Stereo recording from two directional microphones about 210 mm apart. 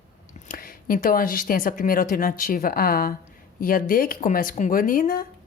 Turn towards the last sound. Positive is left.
turn(degrees=40)  # may be behind; listen again after turning